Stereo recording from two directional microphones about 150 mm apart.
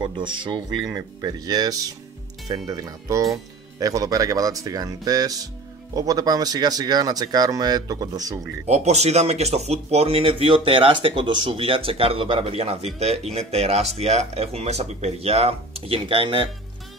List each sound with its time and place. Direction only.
0.0 s speech: 30° right (ahead or behind)
8.6 s speech: 45° right (ahead or behind)